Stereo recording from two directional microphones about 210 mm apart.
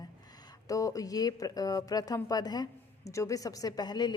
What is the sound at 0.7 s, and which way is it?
Speech, 15° left (ahead or behind).